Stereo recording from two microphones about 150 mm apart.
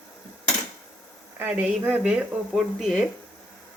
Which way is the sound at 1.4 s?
10° right (ahead or behind).